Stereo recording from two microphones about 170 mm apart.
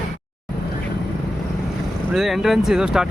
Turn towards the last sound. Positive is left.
turn(degrees=-5)  # may be behind; listen again after turning